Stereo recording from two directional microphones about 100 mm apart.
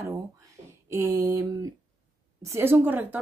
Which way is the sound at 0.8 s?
30° right (ahead or behind).